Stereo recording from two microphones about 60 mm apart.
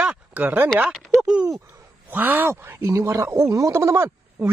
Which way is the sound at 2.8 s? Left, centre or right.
Right.